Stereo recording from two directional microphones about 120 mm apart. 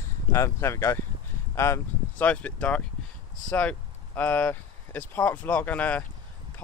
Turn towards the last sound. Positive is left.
turn(degrees=15)  # may be behind; listen again after turning